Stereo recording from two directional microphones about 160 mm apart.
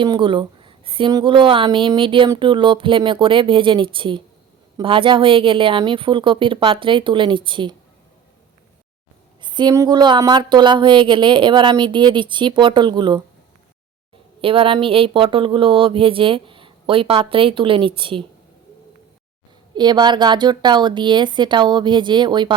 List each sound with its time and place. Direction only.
0.0 s a woman's voice: 30° right (ahead or behind)
9.4 s speech: 30° right (ahead or behind)
14.4 s a woman's voice: 35° right (ahead or behind)
19.7 s speech: 25° right (ahead or behind)